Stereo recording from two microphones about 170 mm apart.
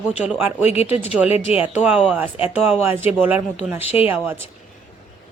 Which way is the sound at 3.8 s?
35° left (ahead or behind).